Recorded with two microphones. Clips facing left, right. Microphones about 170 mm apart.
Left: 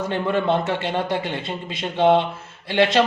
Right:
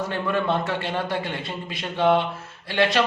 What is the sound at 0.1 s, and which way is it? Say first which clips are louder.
A man's voice: left 5 dB; 25° left (ahead or behind).